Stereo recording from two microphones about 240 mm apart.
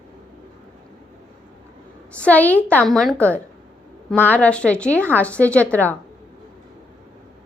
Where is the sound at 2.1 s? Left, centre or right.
Centre.